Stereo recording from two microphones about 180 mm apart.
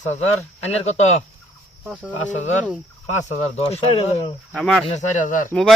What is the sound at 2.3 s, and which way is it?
Speech, 40° left (ahead or behind).